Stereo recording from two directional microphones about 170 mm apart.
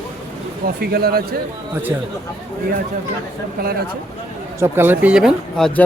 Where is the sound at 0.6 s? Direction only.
65° right (ahead or behind).